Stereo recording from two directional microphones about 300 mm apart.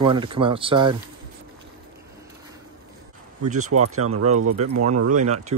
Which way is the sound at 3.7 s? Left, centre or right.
Right.